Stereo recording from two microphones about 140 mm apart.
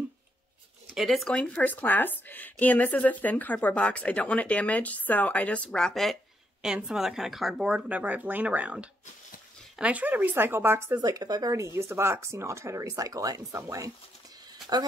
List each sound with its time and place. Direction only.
0.9 s speech: centre (ahead or behind); by 11.0 s 15° right (ahead or behind)
11.0 s speech: 25° right (ahead or behind)